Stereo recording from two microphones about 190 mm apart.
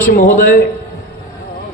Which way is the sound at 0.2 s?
45° left (ahead or behind).